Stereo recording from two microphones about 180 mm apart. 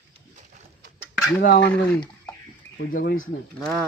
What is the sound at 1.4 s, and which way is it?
Speech, 65° left (ahead or behind).